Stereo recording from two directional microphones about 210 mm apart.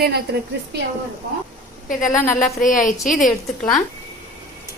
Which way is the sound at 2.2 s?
40° left (ahead or behind).